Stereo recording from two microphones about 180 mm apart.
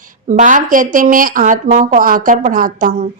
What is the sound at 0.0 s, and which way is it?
A woman's voice, 45° right (ahead or behind).